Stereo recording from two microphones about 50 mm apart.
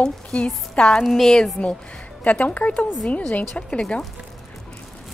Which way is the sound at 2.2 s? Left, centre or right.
Left.